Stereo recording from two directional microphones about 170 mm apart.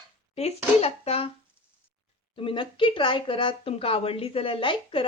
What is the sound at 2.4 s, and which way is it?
Speech, 30° left (ahead or behind).